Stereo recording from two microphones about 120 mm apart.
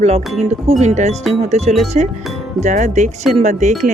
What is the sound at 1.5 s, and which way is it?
Speech, 65° right (ahead or behind).